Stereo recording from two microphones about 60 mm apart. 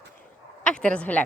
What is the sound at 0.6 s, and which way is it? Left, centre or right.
Speech, centre.